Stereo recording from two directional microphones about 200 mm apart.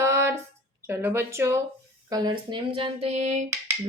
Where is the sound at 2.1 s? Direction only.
20° right (ahead or behind).